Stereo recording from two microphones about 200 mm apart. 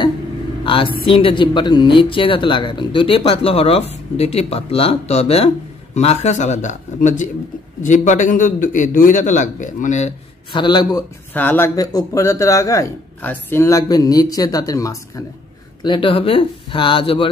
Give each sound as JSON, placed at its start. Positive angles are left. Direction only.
{"t": 0.7, "sound": "a man's voice", "side_deg": 25}
{"t": 10.6, "sound": "speech", "side_deg": 20}